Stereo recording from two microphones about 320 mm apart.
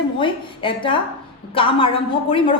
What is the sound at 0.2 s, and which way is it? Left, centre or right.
A woman's voice, centre.